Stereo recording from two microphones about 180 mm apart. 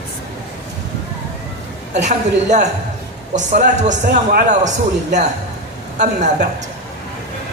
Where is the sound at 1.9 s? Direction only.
40° right (ahead or behind).